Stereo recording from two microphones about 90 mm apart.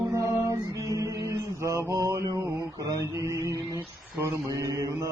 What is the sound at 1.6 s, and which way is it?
Mantra, 35° right (ahead or behind).